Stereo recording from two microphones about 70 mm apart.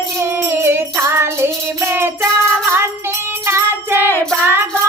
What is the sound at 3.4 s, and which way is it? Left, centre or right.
Music, right.